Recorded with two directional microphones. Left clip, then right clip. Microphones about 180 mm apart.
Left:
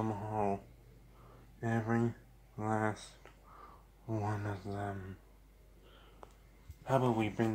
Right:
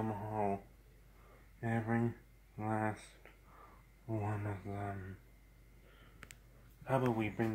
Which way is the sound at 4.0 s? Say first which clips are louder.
Left 3 dB; 10° left (ahead or behind).